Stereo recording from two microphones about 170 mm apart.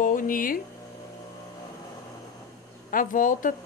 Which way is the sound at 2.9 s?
50° left (ahead or behind).